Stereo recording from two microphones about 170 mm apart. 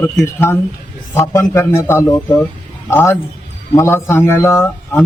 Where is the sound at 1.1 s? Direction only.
15° left (ahead or behind).